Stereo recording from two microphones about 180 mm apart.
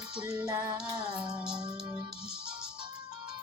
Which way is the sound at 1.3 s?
5° right (ahead or behind).